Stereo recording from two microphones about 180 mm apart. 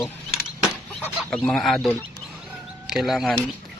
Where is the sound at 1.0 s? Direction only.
5° left (ahead or behind).